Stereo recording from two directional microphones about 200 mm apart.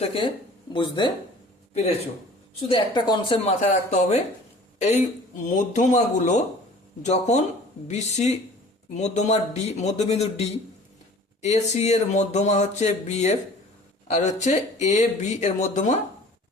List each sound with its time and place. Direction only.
0.0 s speech: 25° left (ahead or behind)
2.6 s speech: 25° left (ahead or behind)
3.6 s speech: 40° left (ahead or behind)
5.4 s speech: 40° left (ahead or behind)
11.4 s speech: 35° left (ahead or behind)